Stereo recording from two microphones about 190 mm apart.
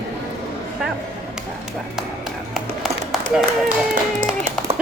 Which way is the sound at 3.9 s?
45° right (ahead or behind).